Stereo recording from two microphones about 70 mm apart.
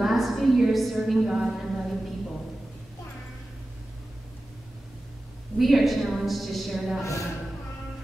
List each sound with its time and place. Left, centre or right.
0.0 s a woman's voice: centre
5.6 s a woman's voice: centre
7.0 s a man's voice: left